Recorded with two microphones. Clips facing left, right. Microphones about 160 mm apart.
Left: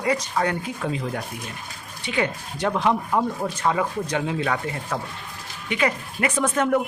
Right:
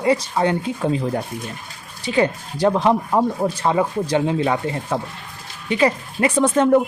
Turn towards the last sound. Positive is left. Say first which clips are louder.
# right 6 dB
turn(degrees=-30)  # may be behind; listen again after turning